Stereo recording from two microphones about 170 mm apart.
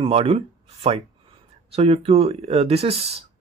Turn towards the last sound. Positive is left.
turn(degrees=-35)  # may be behind; listen again after turning